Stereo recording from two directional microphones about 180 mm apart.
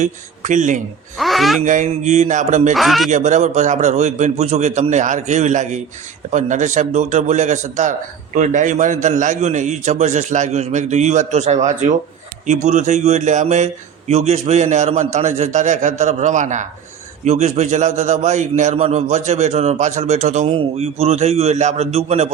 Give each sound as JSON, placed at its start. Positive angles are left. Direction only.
{"t": 0.0, "sound": "a man's voice", "side_deg": -45}
{"t": 1.2, "sound": "speech", "side_deg": 0}
{"t": 1.6, "sound": "a man's voice", "side_deg": -45}
{"t": 2.7, "sound": "speech", "side_deg": 0}
{"t": 3.1, "sound": "a man's voice", "side_deg": -45}